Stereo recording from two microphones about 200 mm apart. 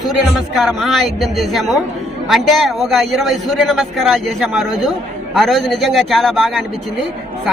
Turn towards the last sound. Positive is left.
turn(degrees=0)  # may be behind; listen again after turning